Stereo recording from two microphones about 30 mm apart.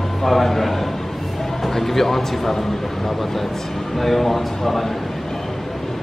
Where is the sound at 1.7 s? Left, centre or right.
Centre.